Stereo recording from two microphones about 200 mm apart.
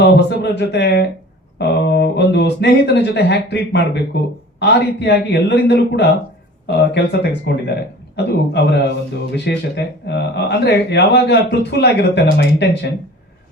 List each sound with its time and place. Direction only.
0.0 s speech: 60° left (ahead or behind)